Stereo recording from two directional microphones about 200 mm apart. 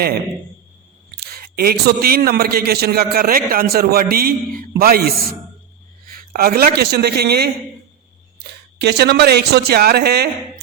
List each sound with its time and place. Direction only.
1.1 s a man's voice: 50° right (ahead or behind)
8.8 s a man's voice: 55° right (ahead or behind)